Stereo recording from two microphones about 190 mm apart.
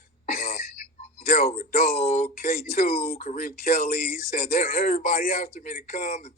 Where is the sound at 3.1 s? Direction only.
30° left (ahead or behind).